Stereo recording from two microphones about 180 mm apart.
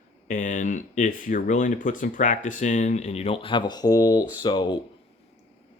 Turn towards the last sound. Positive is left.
turn(degrees=25)  # may be behind; listen again after turning